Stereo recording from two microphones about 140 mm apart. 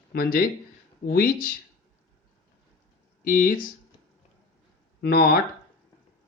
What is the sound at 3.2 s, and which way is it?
Speech, 90° left.